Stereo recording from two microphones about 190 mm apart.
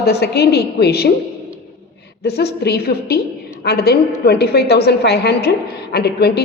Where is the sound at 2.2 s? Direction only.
60° left (ahead or behind).